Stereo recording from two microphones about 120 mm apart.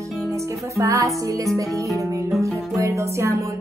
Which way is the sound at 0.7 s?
25° right (ahead or behind).